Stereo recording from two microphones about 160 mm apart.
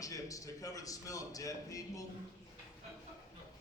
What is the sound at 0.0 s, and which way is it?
A man's voice, 20° left (ahead or behind).